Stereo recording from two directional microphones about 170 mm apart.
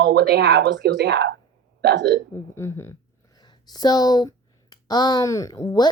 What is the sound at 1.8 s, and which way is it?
Speech, 80° right.